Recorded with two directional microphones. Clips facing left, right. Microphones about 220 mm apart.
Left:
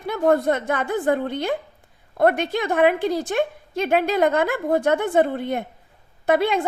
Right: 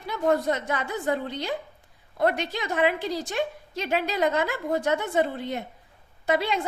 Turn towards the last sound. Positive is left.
turn(degrees=55)  # may be behind; listen again after turning